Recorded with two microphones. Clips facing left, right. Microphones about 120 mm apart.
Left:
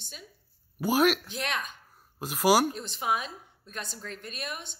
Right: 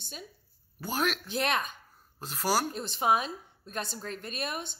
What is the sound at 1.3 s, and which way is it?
Speech, 40° right (ahead or behind).